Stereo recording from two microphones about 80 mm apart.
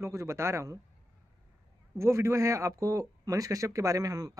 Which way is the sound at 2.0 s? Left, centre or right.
Right.